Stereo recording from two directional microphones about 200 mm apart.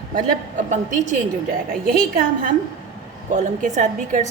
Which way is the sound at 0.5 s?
40° right (ahead or behind).